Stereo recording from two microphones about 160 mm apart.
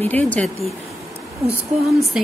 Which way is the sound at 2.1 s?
5° right (ahead or behind).